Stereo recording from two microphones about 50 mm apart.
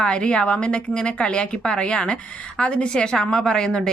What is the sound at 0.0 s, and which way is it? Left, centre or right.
A woman's voice, centre.